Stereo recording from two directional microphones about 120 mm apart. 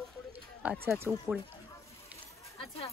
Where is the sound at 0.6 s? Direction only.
20° right (ahead or behind).